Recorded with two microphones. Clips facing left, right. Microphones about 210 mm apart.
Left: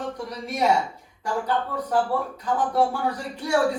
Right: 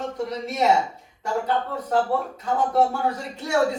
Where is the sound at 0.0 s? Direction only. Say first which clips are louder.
Right 3 dB; 25° right (ahead or behind).